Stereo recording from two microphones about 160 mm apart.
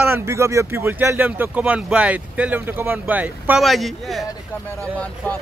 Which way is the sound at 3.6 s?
Centre (ahead or behind).